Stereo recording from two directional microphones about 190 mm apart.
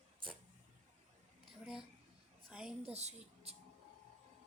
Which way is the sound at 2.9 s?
35° right (ahead or behind).